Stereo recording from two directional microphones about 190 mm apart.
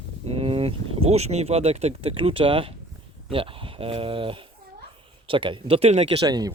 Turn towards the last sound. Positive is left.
turn(degrees=-20)  # may be behind; listen again after turning